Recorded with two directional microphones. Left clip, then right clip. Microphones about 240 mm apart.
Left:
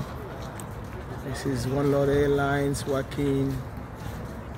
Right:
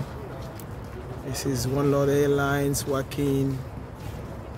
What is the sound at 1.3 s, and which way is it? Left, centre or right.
Speech, centre.